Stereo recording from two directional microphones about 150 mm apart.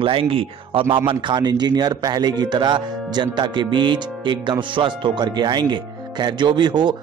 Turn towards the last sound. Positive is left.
turn(degrees=-30)  # may be behind; listen again after turning